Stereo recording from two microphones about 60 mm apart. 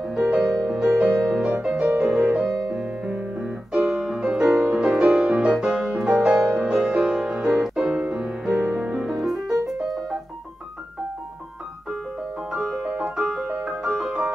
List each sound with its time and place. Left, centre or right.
0.0 s music: centre
2.8 s piano: centre
4.0 s music: centre
7.8 s music: centre
12.6 s piano: centre
13.0 s music: centre
13.5 s music: centre
13.8 s music: centre